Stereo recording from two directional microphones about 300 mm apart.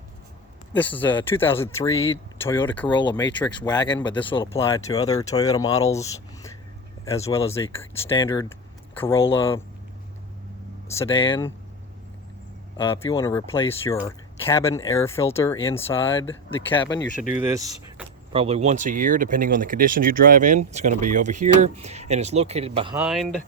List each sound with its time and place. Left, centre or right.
0.8 s speech: centre
10.9 s speech: centre
12.7 s speech: centre
17.2 s speech: left
17.4 s speech: centre
23.0 s speech: centre